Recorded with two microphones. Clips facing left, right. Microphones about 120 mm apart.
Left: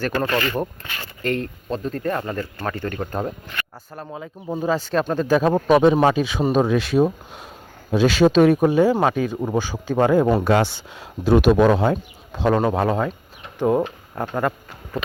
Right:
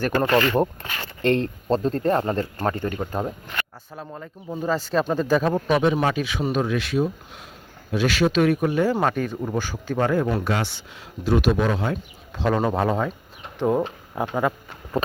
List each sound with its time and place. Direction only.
0.0 s speech: 20° right (ahead or behind)
2.8 s a man's voice: 10° right (ahead or behind)
4.0 s a man's voice: 5° left (ahead or behind)
5.5 s speech: 35° left (ahead or behind)
8.8 s a man's voice: 10° left (ahead or behind)
9.4 s speech: 15° left (ahead or behind)
10.2 s speech: 40° left (ahead or behind)
11.2 s a man's voice: 55° left (ahead or behind)
12.5 s a man's voice: 5° left (ahead or behind)